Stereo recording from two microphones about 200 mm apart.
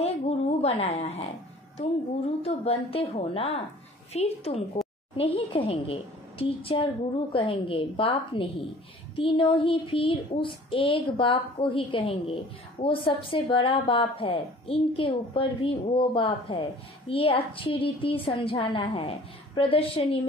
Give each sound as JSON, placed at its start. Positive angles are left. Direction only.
{"t": 0.0, "sound": "a woman's voice", "side_deg": 30}
{"t": 2.4, "sound": "a woman's voice", "side_deg": 30}